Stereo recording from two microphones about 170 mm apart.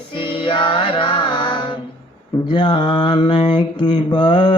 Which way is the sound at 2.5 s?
30° left (ahead or behind).